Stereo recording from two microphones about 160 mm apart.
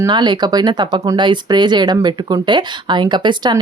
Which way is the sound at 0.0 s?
25° right (ahead or behind).